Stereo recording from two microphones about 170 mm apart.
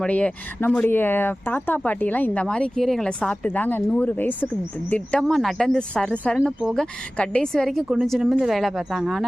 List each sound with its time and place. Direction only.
0.0 s speech: 10° left (ahead or behind)